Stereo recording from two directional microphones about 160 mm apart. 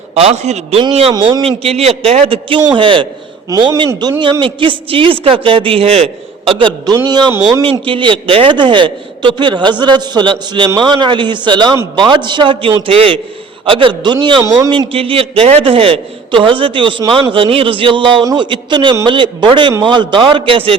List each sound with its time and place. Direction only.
0.1 s a man's voice: 40° right (ahead or behind)
1.1 s a man's voice: 30° right (ahead or behind)
14.7 s a man's voice: 35° right (ahead or behind)